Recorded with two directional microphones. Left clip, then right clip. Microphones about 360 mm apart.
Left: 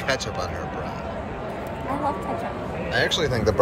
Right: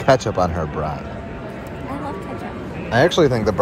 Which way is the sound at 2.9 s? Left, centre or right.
Centre.